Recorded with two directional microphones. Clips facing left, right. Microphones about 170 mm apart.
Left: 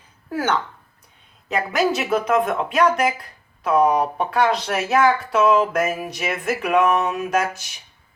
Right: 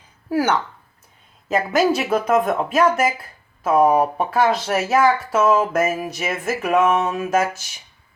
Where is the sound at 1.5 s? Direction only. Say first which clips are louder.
Right 3 dB; centre (ahead or behind).